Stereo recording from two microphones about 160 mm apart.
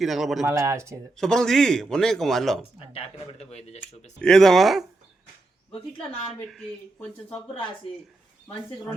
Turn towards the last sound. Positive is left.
turn(degrees=40)  # may be behind; listen again after turning